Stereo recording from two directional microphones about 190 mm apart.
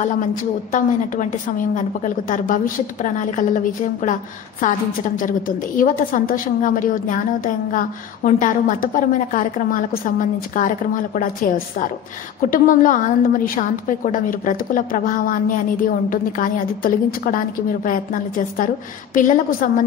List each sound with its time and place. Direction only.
0.3 s a woman's voice: 45° left (ahead or behind)